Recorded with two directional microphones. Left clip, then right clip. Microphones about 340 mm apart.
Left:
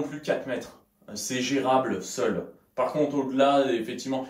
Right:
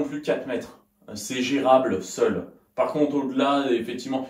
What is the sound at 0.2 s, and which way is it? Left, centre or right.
Speech, centre.